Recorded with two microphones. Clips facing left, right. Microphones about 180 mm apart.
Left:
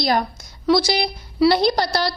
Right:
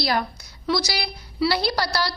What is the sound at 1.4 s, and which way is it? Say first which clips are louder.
Speech: left 6 dB; 20° left (ahead or behind).